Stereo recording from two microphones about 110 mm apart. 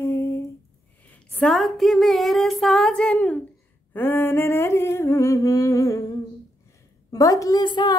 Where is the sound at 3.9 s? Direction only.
20° left (ahead or behind).